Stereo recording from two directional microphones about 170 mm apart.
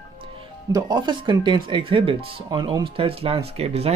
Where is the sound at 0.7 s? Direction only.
20° right (ahead or behind).